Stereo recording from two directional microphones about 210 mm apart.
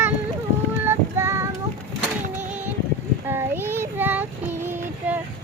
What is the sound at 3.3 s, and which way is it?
Child singing, 10° right (ahead or behind).